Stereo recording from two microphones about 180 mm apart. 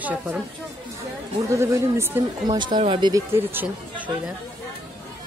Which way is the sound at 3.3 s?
10° right (ahead or behind).